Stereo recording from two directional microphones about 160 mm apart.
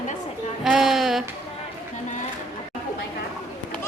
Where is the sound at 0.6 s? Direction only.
5° right (ahead or behind).